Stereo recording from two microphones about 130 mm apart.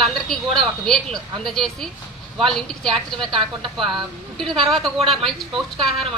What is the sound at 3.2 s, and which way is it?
Speech, 40° right (ahead or behind).